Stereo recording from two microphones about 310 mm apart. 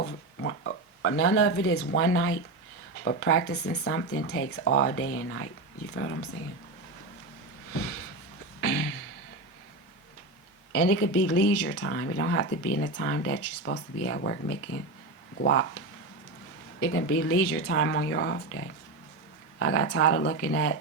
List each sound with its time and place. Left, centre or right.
0.0 s a sound: left
1.9 s speech: left
7.7 s a sound: left
10.7 s speech: left
11.2 s speech: left
16.8 s speech: left